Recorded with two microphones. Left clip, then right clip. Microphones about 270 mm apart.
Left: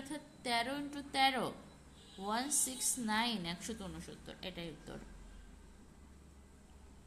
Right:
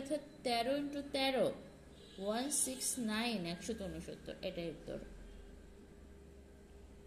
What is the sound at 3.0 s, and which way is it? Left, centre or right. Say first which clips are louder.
A woman's voice: left 4 dB; centre.